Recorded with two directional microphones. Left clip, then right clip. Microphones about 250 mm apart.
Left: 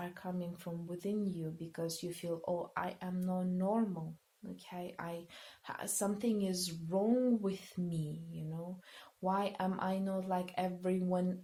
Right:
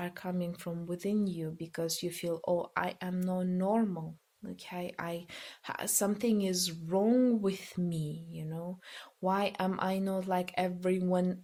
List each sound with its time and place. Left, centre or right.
0.0 s speech: right
9.2 s speech: right